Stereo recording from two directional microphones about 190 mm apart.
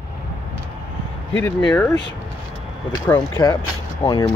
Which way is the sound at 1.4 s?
5° left (ahead or behind).